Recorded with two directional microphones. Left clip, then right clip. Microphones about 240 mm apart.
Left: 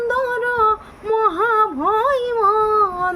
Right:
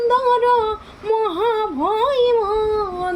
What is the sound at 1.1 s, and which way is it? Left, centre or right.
Speech, centre.